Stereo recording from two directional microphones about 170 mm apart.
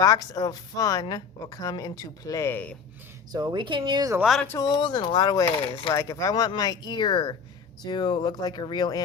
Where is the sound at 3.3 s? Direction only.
25° right (ahead or behind).